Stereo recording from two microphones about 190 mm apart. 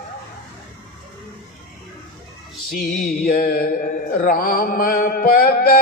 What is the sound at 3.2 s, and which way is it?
Mantra, 50° left (ahead or behind).